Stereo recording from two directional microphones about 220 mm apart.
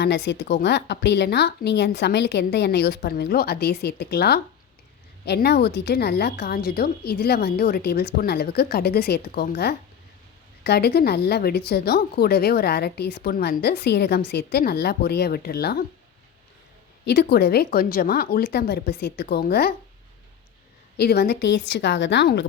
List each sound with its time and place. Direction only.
0.3 s a woman's voice: 50° left (ahead or behind)
17.1 s a woman's voice: 45° left (ahead or behind)
21.0 s a woman's voice: 45° left (ahead or behind)